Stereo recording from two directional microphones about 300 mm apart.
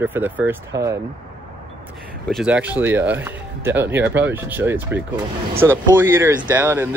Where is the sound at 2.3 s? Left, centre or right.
Centre.